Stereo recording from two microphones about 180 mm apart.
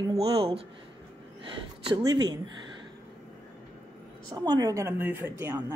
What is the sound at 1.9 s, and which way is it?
Speech, 25° right (ahead or behind).